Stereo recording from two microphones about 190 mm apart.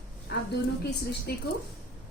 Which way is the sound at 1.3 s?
55° left (ahead or behind).